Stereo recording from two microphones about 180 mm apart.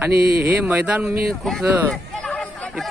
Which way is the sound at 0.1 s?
60° right (ahead or behind).